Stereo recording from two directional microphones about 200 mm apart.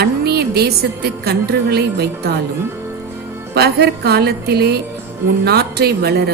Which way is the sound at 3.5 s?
55° right (ahead or behind).